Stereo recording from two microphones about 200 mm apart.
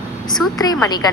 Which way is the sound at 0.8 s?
20° left (ahead or behind).